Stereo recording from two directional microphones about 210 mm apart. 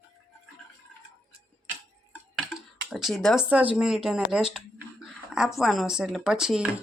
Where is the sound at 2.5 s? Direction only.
Centre (ahead or behind).